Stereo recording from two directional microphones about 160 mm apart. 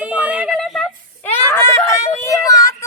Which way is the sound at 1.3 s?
15° left (ahead or behind).